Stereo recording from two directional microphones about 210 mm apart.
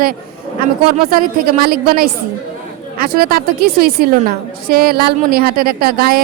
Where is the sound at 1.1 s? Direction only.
40° right (ahead or behind).